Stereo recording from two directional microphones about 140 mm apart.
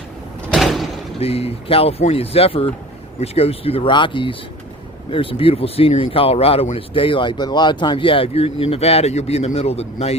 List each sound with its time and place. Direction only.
0.5 s door: centre (ahead or behind)
1.2 s speech: 45° left (ahead or behind)